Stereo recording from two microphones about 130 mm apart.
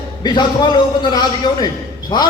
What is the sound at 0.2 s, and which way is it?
A man's voice, 35° left (ahead or behind).